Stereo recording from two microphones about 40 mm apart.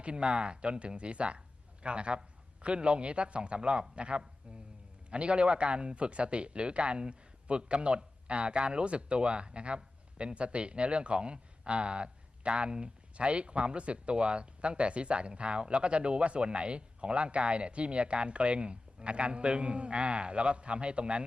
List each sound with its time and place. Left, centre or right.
0.0 s speech: right